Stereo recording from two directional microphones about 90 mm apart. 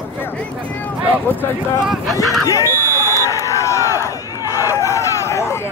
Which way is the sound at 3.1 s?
35° left (ahead or behind).